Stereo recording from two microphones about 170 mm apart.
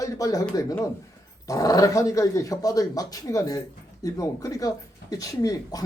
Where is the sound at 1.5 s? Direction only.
20° left (ahead or behind).